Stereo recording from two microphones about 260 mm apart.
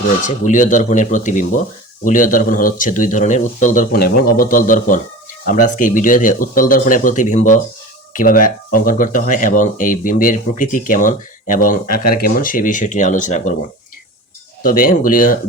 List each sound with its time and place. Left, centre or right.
0.3 s speech: left
14.6 s speech: left